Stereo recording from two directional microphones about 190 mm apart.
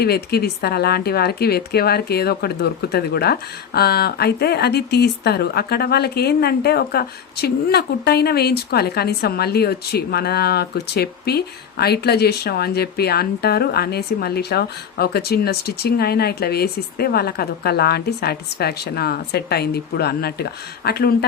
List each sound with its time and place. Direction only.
0.0 s speech: 55° left (ahead or behind)